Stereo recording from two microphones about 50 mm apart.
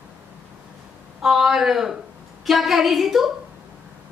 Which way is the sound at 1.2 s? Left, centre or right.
Centre.